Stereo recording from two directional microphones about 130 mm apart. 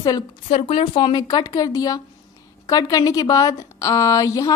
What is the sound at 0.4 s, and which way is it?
A woman's voice, 40° left (ahead or behind).